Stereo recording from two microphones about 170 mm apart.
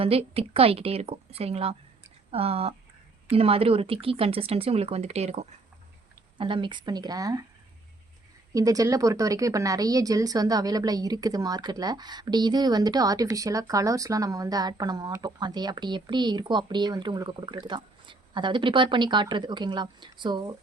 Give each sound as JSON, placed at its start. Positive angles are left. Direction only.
{"t": 0.0, "sound": "speech", "side_deg": -35}
{"t": 6.3, "sound": "a woman's voice", "side_deg": -30}
{"t": 8.5, "sound": "a woman's voice", "side_deg": -20}